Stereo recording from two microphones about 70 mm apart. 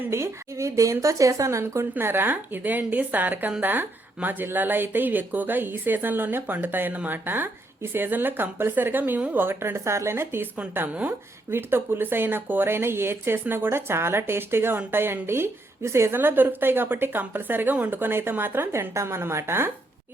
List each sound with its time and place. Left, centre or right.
0.1 s a woman's voice: right
10.6 s speech: right
11.5 s a woman's voice: right